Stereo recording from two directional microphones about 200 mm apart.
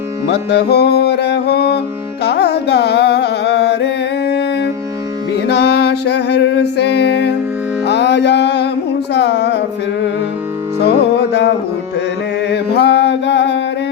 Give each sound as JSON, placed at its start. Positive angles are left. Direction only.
{"t": 0.3, "sound": "music", "side_deg": 55}
{"t": 2.2, "sound": "carnatic music", "side_deg": 55}
{"t": 5.5, "sound": "music", "side_deg": 55}
{"t": 9.1, "sound": "a sound", "side_deg": 60}
{"t": 10.8, "sound": "music", "side_deg": 55}